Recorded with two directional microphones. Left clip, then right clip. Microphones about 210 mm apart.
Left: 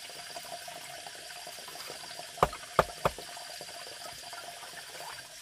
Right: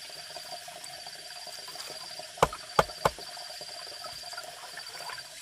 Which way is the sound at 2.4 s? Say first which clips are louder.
Right 2 dB; 40° right (ahead or behind).